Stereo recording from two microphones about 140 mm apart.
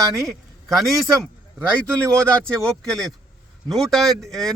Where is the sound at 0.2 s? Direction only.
Centre (ahead or behind).